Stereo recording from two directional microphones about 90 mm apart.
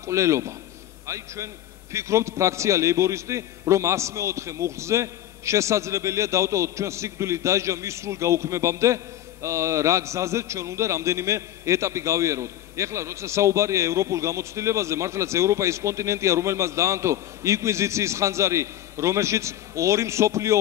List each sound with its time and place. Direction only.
0.0 s a man's voice: 35° right (ahead or behind)